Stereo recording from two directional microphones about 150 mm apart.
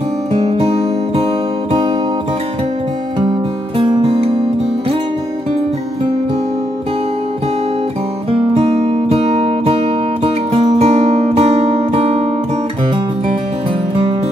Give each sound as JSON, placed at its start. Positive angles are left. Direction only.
{"t": 0.3, "sound": "music", "side_deg": -40}
{"t": 3.2, "sound": "music", "side_deg": -30}
{"t": 8.3, "sound": "music", "side_deg": -40}